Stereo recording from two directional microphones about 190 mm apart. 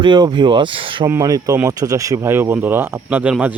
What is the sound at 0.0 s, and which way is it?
Speech, 25° right (ahead or behind).